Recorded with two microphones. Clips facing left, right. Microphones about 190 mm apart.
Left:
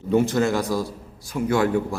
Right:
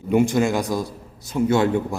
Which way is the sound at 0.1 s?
15° right (ahead or behind).